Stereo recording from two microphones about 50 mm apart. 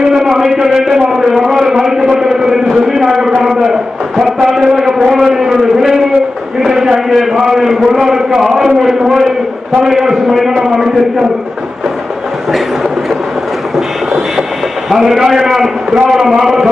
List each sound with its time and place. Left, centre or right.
0.0 s a man's voice: centre
3.4 s a sound: centre
7.9 s a man's voice: centre
14.8 s a man's voice: centre